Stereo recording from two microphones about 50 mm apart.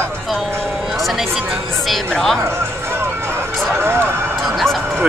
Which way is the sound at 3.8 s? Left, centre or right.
Right.